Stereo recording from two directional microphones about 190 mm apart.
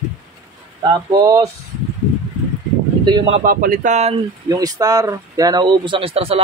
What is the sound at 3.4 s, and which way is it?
Speech, 50° right (ahead or behind).